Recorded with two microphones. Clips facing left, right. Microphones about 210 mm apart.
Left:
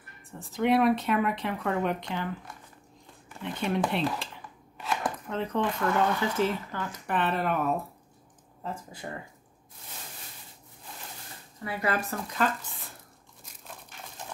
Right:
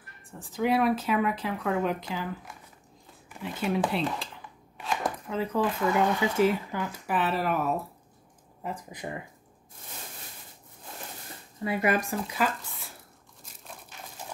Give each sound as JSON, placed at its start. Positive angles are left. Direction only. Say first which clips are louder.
{"t": 0.3, "sound": "speech", "louder": "left 1 dB", "side_deg": 0}
{"t": 8.6, "sound": "speech", "louder": "right 1 dB", "side_deg": -15}
{"t": 11.6, "sound": "speech", "louder": "right 4 dB", "side_deg": -20}